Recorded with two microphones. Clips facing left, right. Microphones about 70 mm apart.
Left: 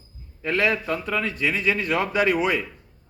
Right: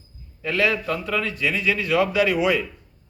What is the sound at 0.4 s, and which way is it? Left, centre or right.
A man's voice, left.